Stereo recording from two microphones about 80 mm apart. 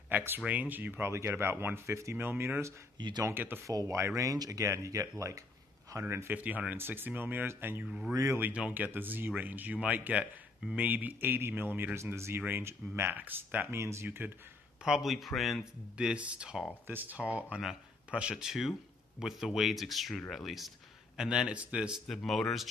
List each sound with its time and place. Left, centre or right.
0.1 s speech: right
3.0 s speech: right
3.3 s speech: right
3.6 s speech: right
7.8 s speech: centre
8.1 s speech: right
8.4 s speech: centre
13.7 s speech: right
14.0 s speech: right
14.8 s speech: centre
16.0 s speech: centre
16.8 s speech: right
22.0 s speech: centre